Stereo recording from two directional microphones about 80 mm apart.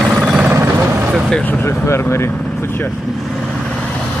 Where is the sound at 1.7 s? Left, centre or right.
Left.